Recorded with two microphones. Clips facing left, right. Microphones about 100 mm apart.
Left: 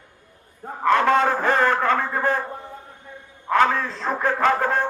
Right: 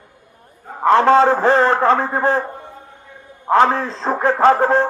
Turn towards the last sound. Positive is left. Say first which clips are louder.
# right 7 dB
turn(degrees=-30)  # may be behind; listen again after turning